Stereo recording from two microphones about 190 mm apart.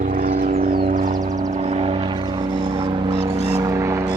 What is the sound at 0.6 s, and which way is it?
Music, 50° right (ahead or behind).